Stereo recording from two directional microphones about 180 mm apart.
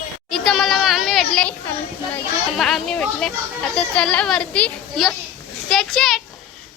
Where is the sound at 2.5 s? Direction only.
Centre (ahead or behind).